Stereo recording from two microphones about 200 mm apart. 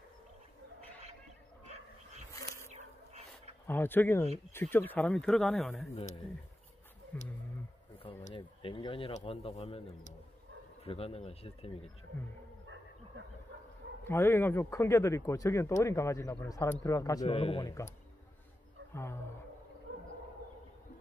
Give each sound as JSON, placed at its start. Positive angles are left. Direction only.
{"t": 2.3, "sound": "a sound", "side_deg": 15}
{"t": 2.7, "sound": "a sound", "side_deg": -35}
{"t": 3.6, "sound": "speech", "side_deg": 10}
{"t": 7.1, "sound": "speech", "side_deg": 10}
{"t": 8.0, "sound": "speech", "side_deg": 30}
{"t": 12.1, "sound": "speech", "side_deg": 10}
{"t": 14.0, "sound": "speech", "side_deg": 10}
{"t": 17.3, "sound": "speech", "side_deg": 30}